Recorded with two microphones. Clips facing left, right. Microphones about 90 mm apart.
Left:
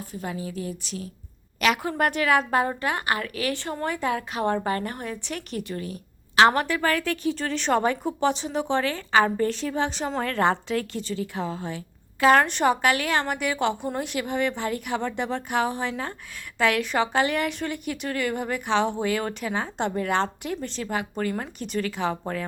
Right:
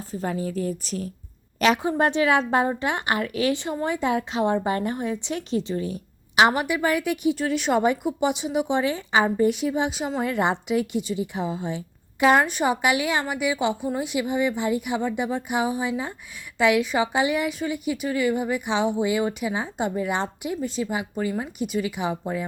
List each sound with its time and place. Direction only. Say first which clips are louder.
0.0 s a woman's voice: right 5 dB; 35° right (ahead or behind)
1.8 s speech: right 3 dB; 25° right (ahead or behind)
6.3 s a woman's voice: left 1 dB; 10° right (ahead or behind)